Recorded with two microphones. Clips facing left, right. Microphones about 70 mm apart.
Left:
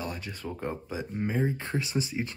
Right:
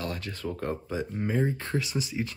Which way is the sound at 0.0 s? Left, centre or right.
Centre.